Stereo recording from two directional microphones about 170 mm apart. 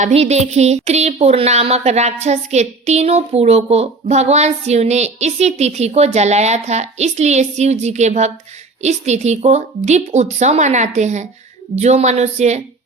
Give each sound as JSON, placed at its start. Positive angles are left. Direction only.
{"t": 0.0, "sound": "speech", "side_deg": -40}